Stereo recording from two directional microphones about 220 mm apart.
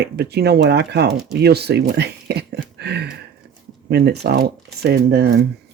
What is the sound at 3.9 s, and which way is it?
Speech, 45° right (ahead or behind).